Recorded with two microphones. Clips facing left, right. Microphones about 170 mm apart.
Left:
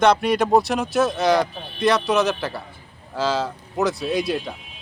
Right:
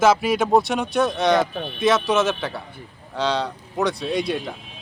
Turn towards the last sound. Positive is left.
turn(degrees=0)  # may be behind; listen again after turning